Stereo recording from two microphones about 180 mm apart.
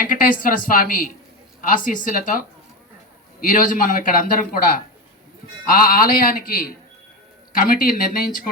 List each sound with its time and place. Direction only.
0.0 s a man's voice: 50° left (ahead or behind)
3.4 s a man's voice: 50° left (ahead or behind)